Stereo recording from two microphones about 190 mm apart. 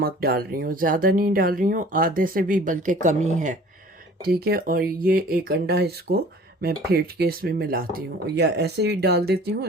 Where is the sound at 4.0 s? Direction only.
55° right (ahead or behind).